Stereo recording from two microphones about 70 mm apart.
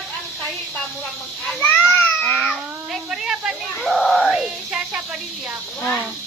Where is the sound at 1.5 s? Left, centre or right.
Left.